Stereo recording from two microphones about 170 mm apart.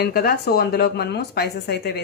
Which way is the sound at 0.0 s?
60° left (ahead or behind).